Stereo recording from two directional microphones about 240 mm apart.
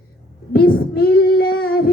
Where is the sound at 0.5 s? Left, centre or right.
Left.